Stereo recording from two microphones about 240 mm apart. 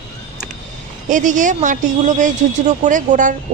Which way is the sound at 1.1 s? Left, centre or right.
Right.